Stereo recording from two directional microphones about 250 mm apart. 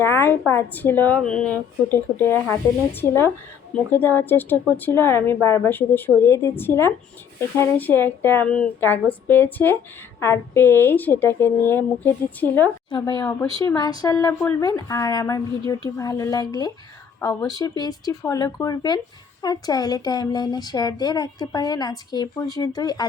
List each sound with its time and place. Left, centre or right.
0.0 s speech: centre